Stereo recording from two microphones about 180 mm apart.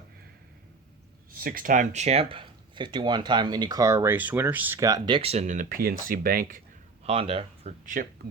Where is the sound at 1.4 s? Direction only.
55° right (ahead or behind).